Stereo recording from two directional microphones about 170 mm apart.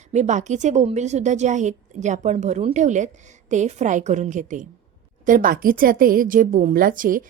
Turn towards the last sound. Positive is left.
turn(degrees=-55)  # may be behind; listen again after turning